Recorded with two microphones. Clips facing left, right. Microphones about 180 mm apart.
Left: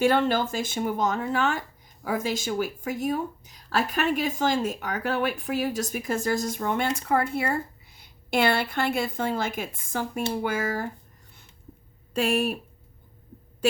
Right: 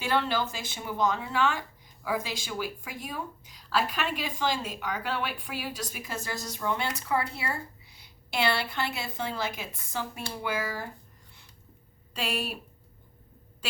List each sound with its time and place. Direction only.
0.0 s speech: 50° left (ahead or behind)
12.1 s speech: 45° left (ahead or behind)